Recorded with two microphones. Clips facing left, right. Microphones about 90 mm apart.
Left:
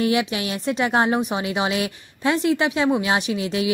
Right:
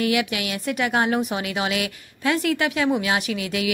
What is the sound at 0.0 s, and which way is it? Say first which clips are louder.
A woman's voice: left 2 dB; 25° left (ahead or behind).